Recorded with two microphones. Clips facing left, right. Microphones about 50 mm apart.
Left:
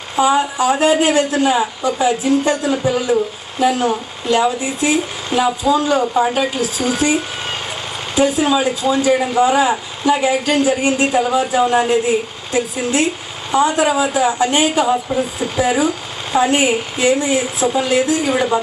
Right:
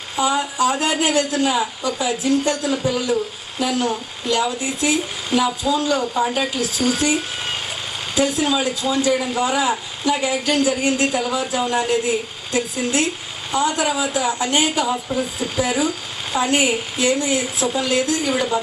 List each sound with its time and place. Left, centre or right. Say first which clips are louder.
0.1 s speech: left 6 dB; left
17.2 s a woman's voice: left 4 dB; centre
17.7 s speech: left 4 dB; left